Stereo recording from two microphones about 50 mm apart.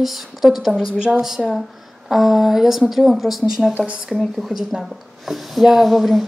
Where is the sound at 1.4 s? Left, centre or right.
Left.